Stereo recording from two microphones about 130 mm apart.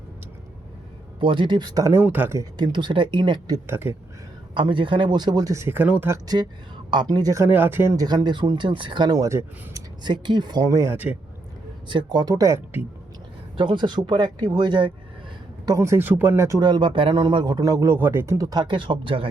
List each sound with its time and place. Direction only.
1.2 s speech: 40° right (ahead or behind); by 2.5 s 20° right (ahead or behind)
2.6 s speech: 35° right (ahead or behind)
3.7 s speech: 20° right (ahead or behind)
4.5 s speech: 40° right (ahead or behind); by 6.1 s 15° right (ahead or behind)
6.2 s speech: 30° right (ahead or behind)
7.4 s speech: 15° right (ahead or behind)
8.0 s speech: 35° right (ahead or behind); by 11.2 s 15° right (ahead or behind)
11.9 s speech: 35° right (ahead or behind); by 12.8 s 20° right (ahead or behind)
13.6 s speech: 35° right (ahead or behind)
15.6 s speech: 25° right (ahead or behind); by 19.3 s 40° right (ahead or behind)